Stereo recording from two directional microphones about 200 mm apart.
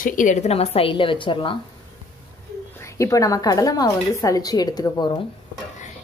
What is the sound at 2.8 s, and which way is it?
A woman's voice, 15° left (ahead or behind).